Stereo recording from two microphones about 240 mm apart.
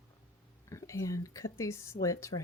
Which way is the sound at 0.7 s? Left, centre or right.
Centre.